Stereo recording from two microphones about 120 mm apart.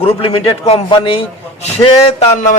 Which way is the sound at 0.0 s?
55° left (ahead or behind).